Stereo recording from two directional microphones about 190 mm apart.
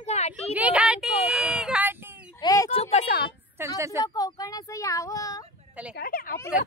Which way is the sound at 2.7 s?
35° left (ahead or behind).